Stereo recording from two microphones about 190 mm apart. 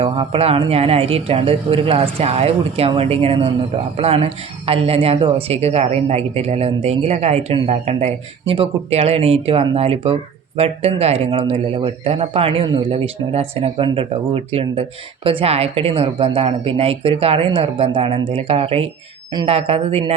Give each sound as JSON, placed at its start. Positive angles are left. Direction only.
{"t": 0.0, "sound": "speech", "side_deg": -30}